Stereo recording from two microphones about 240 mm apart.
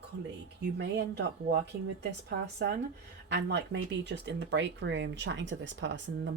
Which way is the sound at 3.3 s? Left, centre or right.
Right.